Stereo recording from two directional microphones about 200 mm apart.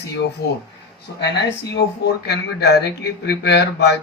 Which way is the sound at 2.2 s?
55° left (ahead or behind).